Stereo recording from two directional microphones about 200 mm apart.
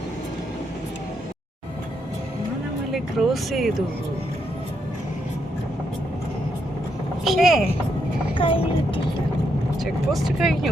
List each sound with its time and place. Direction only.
2.9 s speech: centre (ahead or behind)
7.3 s speech: centre (ahead or behind)
8.4 s speech: 25° left (ahead or behind)
9.8 s speech: centre (ahead or behind)